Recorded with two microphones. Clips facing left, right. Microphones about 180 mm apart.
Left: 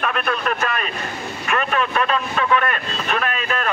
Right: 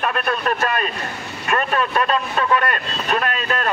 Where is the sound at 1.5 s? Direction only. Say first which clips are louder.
Right 1 dB; 35° right (ahead or behind).